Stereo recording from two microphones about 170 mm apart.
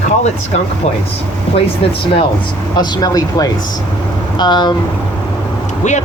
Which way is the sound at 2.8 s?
25° left (ahead or behind).